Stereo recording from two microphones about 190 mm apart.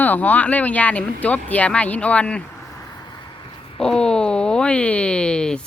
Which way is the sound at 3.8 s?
5° left (ahead or behind).